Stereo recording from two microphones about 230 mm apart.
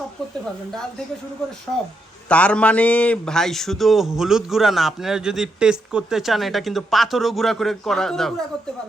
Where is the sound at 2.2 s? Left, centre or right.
Centre.